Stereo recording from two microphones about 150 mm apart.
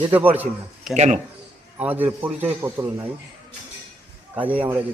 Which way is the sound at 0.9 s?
50° right (ahead or behind).